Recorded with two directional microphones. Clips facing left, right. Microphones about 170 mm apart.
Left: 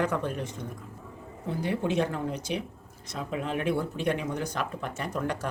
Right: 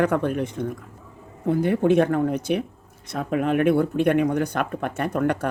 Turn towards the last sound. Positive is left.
turn(degrees=-60)  # may be behind; listen again after turning